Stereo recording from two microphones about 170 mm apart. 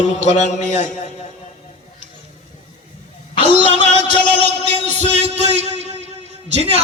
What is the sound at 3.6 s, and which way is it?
Music, 30° left (ahead or behind).